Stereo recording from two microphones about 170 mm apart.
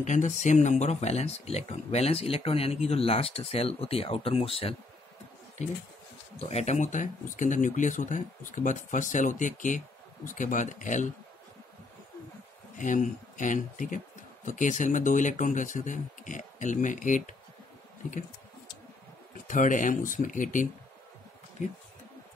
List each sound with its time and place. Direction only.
0.0 s speech: 45° left (ahead or behind)
6.5 s speech: 40° left (ahead or behind)
12.7 s speech: 50° left (ahead or behind)
19.4 s speech: 50° left (ahead or behind)